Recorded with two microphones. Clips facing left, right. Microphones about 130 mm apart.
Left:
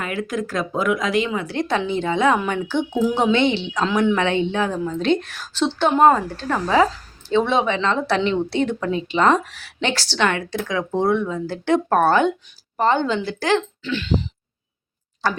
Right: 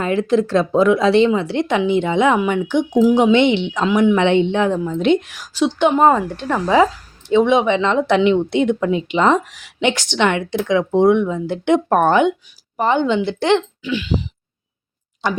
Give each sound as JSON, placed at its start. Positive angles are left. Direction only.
{"t": 0.0, "sound": "speech", "side_deg": -30}
{"t": 13.8, "sound": "speech", "side_deg": -10}
{"t": 15.2, "sound": "speech", "side_deg": -20}